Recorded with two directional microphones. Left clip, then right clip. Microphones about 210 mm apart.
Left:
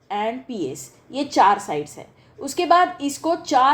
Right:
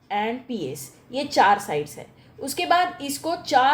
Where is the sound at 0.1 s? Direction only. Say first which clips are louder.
Left 1 dB; 35° left (ahead or behind).